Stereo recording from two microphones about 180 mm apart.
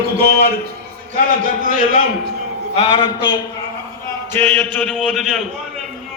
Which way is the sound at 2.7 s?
30° left (ahead or behind).